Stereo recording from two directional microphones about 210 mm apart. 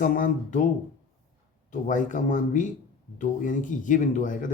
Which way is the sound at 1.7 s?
35° left (ahead or behind).